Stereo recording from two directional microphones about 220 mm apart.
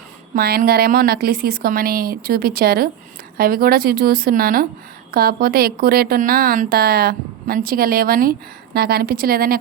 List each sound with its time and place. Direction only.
0.3 s a woman's voice: 45° right (ahead or behind)